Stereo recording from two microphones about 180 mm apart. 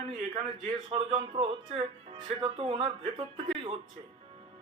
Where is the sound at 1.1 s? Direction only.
30° right (ahead or behind).